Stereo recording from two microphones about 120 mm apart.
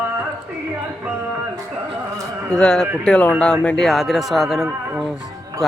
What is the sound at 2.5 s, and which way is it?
Speech, 5° left (ahead or behind).